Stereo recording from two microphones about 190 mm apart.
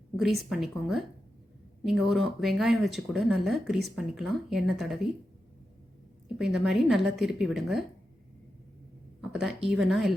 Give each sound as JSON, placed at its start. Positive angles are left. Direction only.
{"t": 0.4, "sound": "speech", "side_deg": 0}
{"t": 6.2, "sound": "speech", "side_deg": 0}
{"t": 9.2, "sound": "speech", "side_deg": 0}